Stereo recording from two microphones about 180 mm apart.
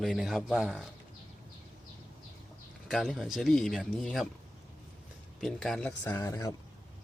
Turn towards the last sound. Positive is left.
turn(degrees=15)  # may be behind; listen again after turning